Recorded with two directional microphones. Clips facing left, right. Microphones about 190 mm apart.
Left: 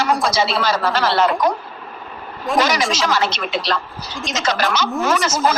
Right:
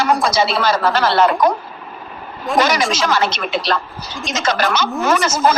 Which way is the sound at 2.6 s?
55° right (ahead or behind).